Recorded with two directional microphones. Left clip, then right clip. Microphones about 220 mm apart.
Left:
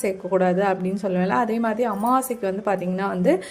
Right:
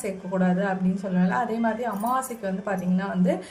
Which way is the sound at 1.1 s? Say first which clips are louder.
Left 4 dB; 40° left (ahead or behind).